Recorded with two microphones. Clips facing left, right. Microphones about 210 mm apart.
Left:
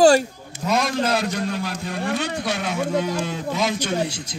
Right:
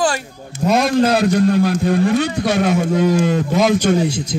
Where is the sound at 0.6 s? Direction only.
55° right (ahead or behind).